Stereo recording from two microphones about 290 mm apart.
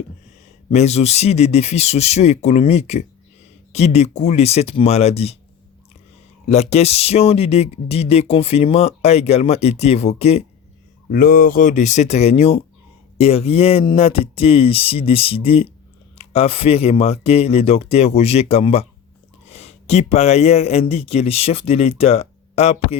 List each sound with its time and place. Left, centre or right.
0.7 s speech: left
6.5 s speech: left